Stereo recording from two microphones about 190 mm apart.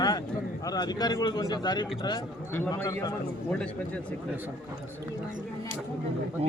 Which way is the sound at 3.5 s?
5° left (ahead or behind).